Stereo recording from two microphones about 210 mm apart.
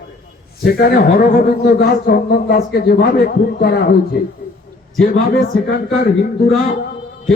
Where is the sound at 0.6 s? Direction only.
45° left (ahead or behind).